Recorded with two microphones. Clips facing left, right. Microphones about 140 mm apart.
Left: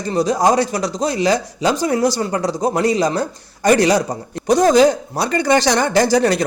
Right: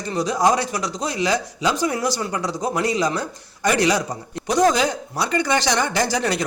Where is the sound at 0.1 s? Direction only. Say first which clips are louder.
Left 4 dB; 35° left (ahead or behind).